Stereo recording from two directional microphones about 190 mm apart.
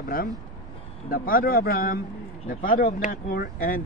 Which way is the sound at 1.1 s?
50° left (ahead or behind).